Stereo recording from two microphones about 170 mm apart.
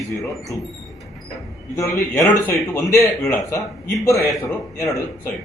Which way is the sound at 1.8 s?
15° left (ahead or behind).